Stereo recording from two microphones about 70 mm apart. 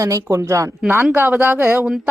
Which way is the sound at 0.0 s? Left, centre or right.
Right.